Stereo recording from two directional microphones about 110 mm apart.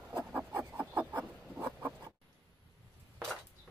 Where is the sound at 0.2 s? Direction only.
15° right (ahead or behind).